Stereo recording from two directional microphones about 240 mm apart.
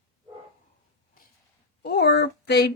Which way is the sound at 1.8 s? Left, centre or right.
Left.